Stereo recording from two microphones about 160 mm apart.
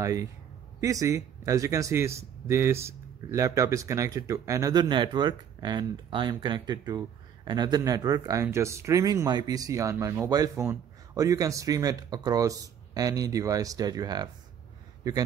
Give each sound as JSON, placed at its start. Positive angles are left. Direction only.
{"t": 0.0, "sound": "speech", "side_deg": -20}